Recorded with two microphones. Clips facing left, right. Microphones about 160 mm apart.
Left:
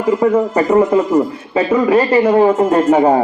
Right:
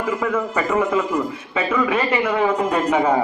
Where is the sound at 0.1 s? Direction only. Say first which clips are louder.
Left 11 dB; 35° left (ahead or behind).